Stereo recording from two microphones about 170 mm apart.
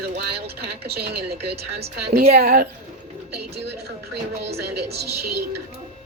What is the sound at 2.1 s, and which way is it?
Speech, 70° right (ahead or behind).